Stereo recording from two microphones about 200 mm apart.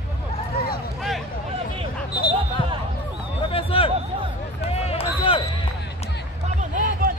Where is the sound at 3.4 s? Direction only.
25° left (ahead or behind).